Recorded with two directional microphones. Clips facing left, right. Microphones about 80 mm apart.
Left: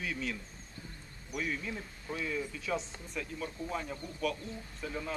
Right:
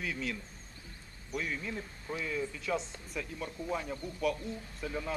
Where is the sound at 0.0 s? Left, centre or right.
Centre.